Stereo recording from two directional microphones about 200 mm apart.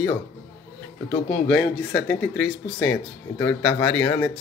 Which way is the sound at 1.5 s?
10° left (ahead or behind).